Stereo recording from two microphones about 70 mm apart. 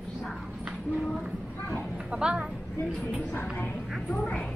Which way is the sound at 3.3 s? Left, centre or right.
Left.